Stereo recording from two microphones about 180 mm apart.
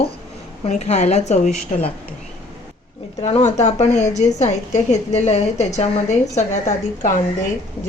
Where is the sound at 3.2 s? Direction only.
40° left (ahead or behind).